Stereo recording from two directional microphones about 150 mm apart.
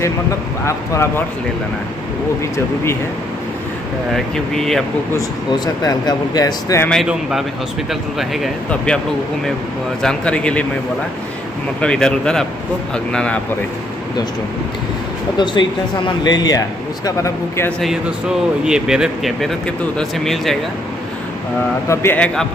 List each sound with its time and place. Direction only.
0.7 s speech: 20° left (ahead or behind)
2.5 s a man's voice: 15° left (ahead or behind)
4.1 s speech: centre (ahead or behind)
5.9 s speech: 25° left (ahead or behind)
6.9 s speech: centre (ahead or behind)
10.0 s a man's voice: 5° left (ahead or behind)
11.8 s a man's voice: 5° left (ahead or behind)
15.3 s speech: 30° left (ahead or behind)
17.6 s speech: 5° left (ahead or behind)
21.8 s a man's voice: 15° left (ahead or behind)